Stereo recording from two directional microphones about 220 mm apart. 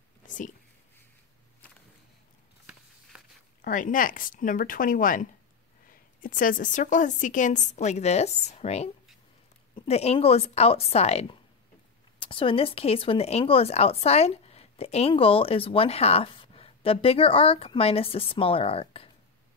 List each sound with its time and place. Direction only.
3.6 s a woman's voice: 35° left (ahead or behind)